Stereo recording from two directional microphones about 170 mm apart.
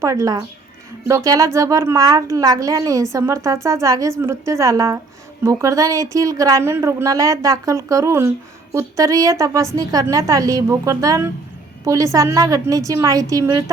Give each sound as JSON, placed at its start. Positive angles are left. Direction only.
{"t": 0.0, "sound": "a woman's voice", "side_deg": -20}